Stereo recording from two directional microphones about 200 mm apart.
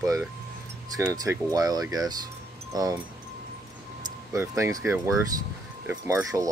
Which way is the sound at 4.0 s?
15° right (ahead or behind).